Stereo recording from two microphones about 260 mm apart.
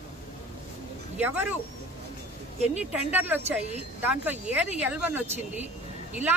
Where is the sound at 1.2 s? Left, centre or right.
Centre.